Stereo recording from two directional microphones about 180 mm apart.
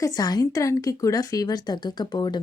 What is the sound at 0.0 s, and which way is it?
Speech, 20° left (ahead or behind).